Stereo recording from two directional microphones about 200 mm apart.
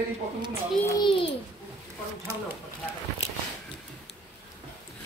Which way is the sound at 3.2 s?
30° left (ahead or behind).